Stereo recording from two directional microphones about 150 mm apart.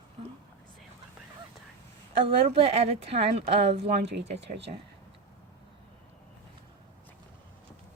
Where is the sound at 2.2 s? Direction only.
40° right (ahead or behind).